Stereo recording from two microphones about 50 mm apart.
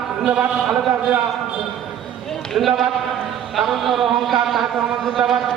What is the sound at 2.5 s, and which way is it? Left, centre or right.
A man's voice, centre.